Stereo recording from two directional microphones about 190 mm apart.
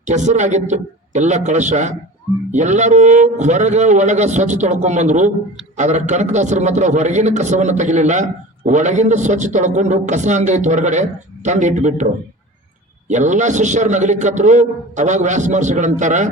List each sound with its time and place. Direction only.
0.0 s a man's voice: 40° right (ahead or behind)
13.1 s a man's voice: 40° right (ahead or behind)